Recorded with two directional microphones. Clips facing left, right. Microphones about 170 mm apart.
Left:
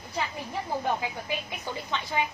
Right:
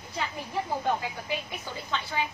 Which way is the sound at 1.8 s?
20° left (ahead or behind).